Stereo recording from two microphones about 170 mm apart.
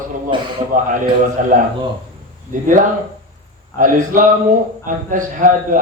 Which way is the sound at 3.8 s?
50° right (ahead or behind).